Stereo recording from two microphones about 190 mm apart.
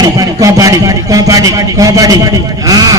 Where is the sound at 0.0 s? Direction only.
20° right (ahead or behind).